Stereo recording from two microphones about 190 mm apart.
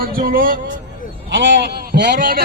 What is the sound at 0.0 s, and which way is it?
Music, 50° right (ahead or behind).